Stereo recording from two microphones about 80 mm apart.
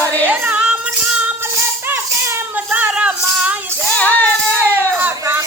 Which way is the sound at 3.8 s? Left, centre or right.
Centre.